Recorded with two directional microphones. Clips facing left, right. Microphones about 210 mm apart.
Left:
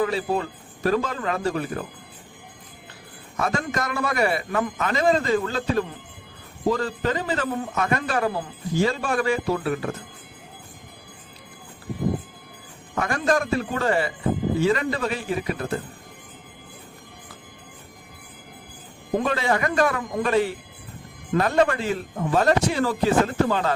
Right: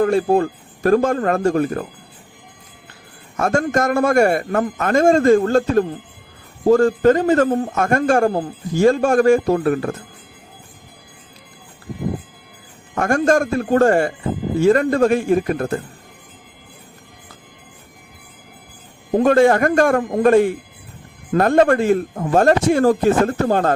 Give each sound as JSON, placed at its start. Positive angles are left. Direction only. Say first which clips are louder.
{"t": 0.0, "sound": "a man's voice", "louder": "right 8 dB", "side_deg": -50}
{"t": 3.3, "sound": "a man's voice", "louder": "right 8 dB", "side_deg": -50}
{"t": 13.0, "sound": "a man's voice", "louder": "right 7 dB", "side_deg": -50}
{"t": 19.2, "sound": "a man's voice", "louder": "right 12 dB", "side_deg": -50}